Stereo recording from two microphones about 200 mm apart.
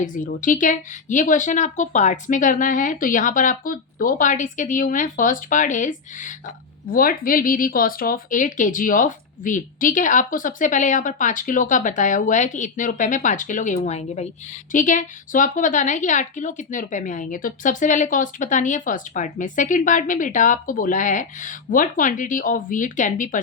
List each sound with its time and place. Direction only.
0.0 s a woman's voice: 40° left (ahead or behind)